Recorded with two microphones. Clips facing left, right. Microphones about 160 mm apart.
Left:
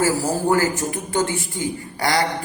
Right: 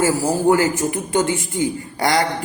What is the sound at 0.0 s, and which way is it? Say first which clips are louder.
A man's voice: right 3 dB; 20° right (ahead or behind).